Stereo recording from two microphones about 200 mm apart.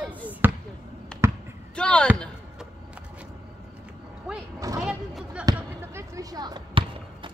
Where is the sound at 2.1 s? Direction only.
Centre (ahead or behind).